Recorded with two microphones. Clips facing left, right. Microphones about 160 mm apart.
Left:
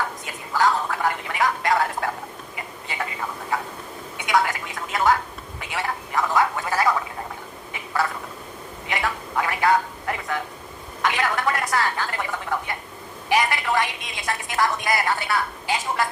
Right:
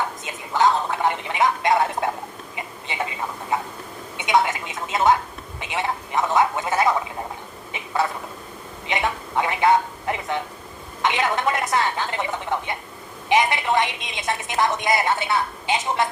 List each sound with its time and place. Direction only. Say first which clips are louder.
0.3 s gargling: right 2 dB; 20° right (ahead or behind)
2.6 s a sound: right 2 dB; 20° right (ahead or behind)
4.2 s a woman's voice: right 2 dB; 20° right (ahead or behind)
5.5 s gargling: right 2 dB; 20° right (ahead or behind)
8.9 s a sound: right 2 dB; 20° right (ahead or behind)
11.0 s a woman's voice: right 2 dB; 20° right (ahead or behind)